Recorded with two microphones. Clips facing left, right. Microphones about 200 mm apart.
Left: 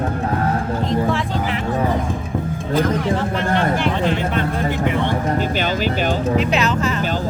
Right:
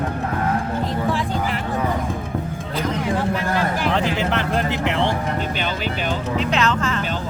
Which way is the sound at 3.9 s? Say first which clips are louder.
Left 1 dB; 85° right.